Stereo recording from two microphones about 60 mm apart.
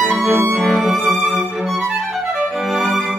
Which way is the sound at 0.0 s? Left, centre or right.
Centre.